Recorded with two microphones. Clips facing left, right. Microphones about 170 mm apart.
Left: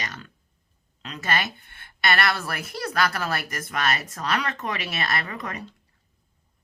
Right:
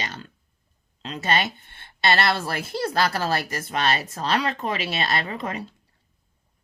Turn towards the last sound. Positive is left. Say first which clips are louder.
# right 3 dB
turn(degrees=-25)  # may be behind; listen again after turning